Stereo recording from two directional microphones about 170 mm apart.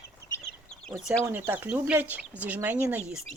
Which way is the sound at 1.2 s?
10° right (ahead or behind).